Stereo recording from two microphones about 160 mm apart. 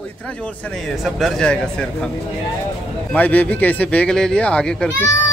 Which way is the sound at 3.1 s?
10° left (ahead or behind).